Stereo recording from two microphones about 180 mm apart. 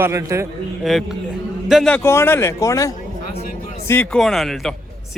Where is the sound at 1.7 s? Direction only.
5° left (ahead or behind).